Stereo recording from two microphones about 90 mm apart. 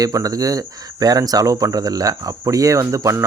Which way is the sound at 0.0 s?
40° right (ahead or behind).